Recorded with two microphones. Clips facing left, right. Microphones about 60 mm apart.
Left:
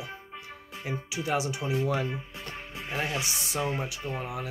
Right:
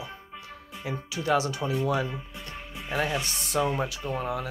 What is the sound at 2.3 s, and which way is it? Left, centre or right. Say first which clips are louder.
Music: even; centre.